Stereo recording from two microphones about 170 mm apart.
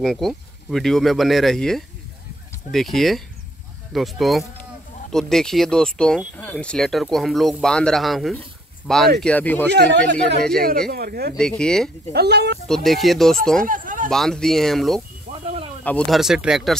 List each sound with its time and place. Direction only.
0.0 s speech: centre (ahead or behind)
9.7 s speech: 85° right
10.9 s speech: 65° right (ahead or behind)
11.3 s speech: 5° left (ahead or behind)
12.1 s speech: 75° right (ahead or behind)
12.6 s speech: centre (ahead or behind)
13.7 s speech: 50° right (ahead or behind)
14.1 s speech: centre (ahead or behind)
15.4 s snake: 35° right (ahead or behind)
15.8 s speech: 5° left (ahead or behind)